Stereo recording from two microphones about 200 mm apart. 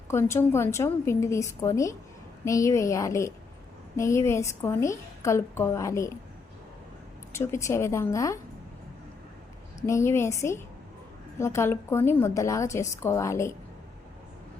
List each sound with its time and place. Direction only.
0.1 s a woman's voice: 15° left (ahead or behind)
7.3 s a woman's voice: 15° left (ahead or behind)
9.8 s a woman's voice: 15° left (ahead or behind)